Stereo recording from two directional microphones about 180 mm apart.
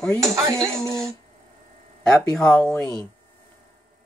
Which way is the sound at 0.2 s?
15° right (ahead or behind).